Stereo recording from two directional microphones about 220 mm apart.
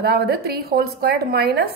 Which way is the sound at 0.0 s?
45° right (ahead or behind).